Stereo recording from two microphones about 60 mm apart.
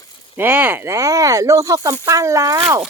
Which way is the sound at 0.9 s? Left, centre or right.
Right.